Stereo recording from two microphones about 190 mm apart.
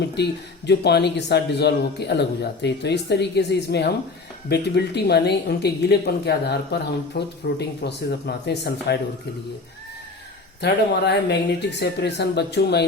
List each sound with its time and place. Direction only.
0.2 s speech: 65° left (ahead or behind)
10.6 s speech: 60° left (ahead or behind)